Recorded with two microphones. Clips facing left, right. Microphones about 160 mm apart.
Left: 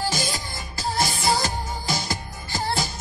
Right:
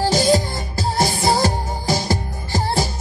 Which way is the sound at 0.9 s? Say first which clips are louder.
Right 5 dB; 35° right (ahead or behind).